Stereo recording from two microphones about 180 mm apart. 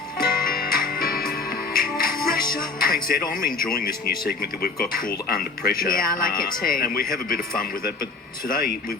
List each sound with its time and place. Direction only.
0.3 s music: 55° left (ahead or behind)
2.5 s speech: 55° left (ahead or behind)